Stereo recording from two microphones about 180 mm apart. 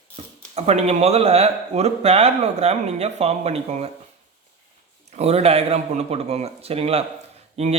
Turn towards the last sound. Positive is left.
turn(degrees=-35)  # may be behind; listen again after turning